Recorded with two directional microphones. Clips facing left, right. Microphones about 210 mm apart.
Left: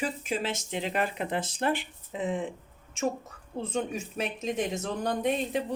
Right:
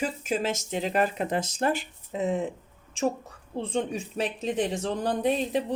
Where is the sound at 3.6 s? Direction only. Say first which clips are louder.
Right 2 dB; 30° right (ahead or behind).